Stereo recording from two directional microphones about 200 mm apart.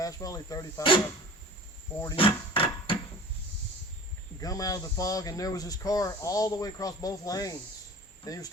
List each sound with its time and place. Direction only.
0.0 s speech: 15° left (ahead or behind)
2.0 s a sound: 20° left (ahead or behind)
4.4 s speech: 15° left (ahead or behind)